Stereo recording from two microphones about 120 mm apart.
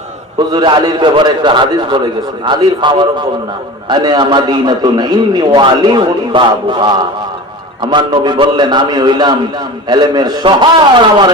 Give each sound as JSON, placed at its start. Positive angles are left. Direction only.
{"t": 0.3, "sound": "a man's voice", "side_deg": -35}